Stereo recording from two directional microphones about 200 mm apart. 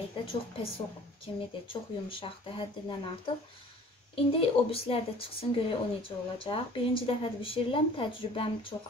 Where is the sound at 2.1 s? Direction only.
25° left (ahead or behind).